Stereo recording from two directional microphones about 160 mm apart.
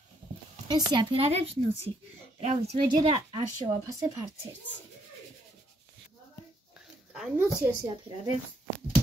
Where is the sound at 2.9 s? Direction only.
30° right (ahead or behind).